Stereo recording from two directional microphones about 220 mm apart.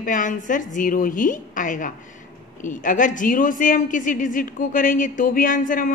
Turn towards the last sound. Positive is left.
turn(degrees=35)  # may be behind; listen again after turning